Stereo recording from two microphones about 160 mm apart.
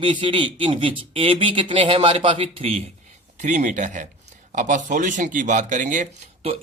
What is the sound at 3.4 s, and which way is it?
Speech, 50° right (ahead or behind).